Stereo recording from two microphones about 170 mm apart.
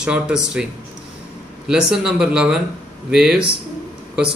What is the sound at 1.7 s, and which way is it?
Speech, 5° right (ahead or behind).